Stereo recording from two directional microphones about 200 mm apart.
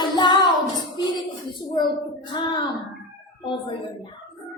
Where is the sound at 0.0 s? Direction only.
20° left (ahead or behind).